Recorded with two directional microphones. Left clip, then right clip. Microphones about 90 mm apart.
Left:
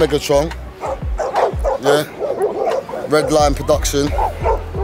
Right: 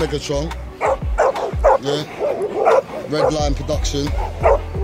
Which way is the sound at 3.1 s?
35° left (ahead or behind).